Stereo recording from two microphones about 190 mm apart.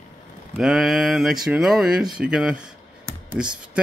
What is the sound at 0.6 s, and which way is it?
Mantra, centre (ahead or behind).